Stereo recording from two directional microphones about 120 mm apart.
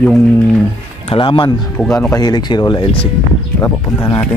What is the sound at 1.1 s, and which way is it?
Speech, 45° left (ahead or behind).